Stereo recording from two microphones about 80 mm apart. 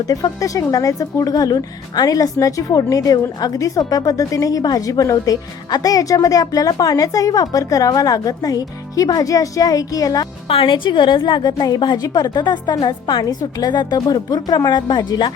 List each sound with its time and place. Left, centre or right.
0.0 s speech: left
10.6 s a woman's voice: left